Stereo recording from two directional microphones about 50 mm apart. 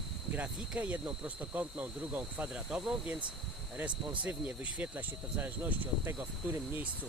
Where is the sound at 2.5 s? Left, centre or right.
Right.